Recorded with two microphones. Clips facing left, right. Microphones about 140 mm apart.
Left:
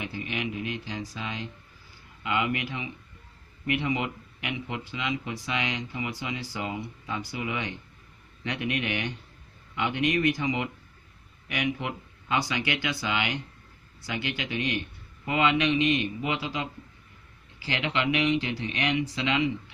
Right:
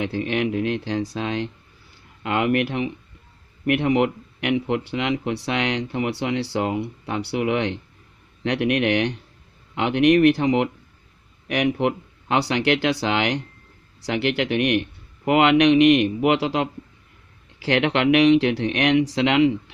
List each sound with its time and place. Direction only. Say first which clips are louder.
0.0 s speech: right 10 dB; 90° right